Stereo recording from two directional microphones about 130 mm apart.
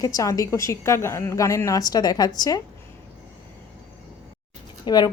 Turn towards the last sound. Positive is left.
turn(degrees=30)  # may be behind; listen again after turning